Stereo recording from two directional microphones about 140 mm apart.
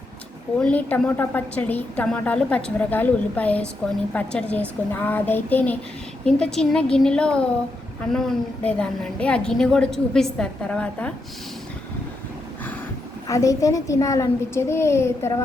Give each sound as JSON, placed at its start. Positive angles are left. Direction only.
{"t": 0.6, "sound": "a woman's voice", "side_deg": 10}
{"t": 13.2, "sound": "a child's voice", "side_deg": 25}